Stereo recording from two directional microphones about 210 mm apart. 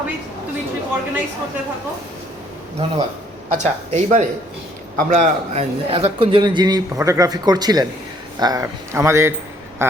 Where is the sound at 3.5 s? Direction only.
35° right (ahead or behind).